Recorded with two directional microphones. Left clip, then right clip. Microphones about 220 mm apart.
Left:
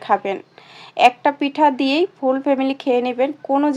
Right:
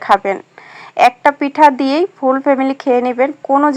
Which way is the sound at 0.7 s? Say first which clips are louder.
Right 3 dB; 15° right (ahead or behind).